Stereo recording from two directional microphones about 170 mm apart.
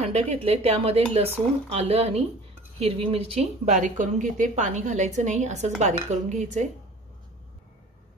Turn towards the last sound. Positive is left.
turn(degrees=-45)  # may be behind; listen again after turning